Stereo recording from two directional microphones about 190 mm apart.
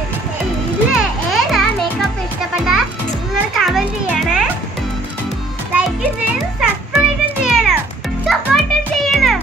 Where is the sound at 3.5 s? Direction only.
Centre (ahead or behind).